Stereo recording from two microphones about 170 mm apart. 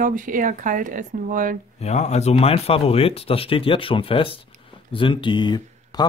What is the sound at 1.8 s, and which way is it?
Speech, 40° left (ahead or behind).